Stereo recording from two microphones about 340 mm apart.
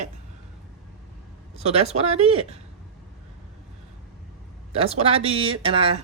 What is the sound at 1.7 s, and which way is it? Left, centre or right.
Speech, centre.